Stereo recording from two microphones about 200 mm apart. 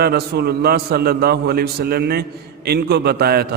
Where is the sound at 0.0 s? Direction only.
50° right (ahead or behind).